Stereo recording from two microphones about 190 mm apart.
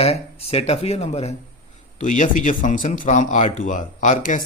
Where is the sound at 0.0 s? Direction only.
30° left (ahead or behind).